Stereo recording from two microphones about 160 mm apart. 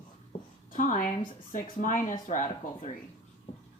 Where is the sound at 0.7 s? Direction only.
55° left (ahead or behind).